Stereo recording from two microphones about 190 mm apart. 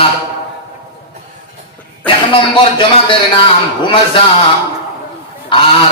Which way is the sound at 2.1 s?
25° left (ahead or behind).